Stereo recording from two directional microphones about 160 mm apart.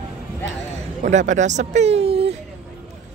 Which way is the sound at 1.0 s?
50° right (ahead or behind).